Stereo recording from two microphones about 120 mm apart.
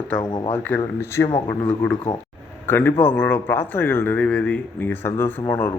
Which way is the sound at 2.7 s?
15° left (ahead or behind).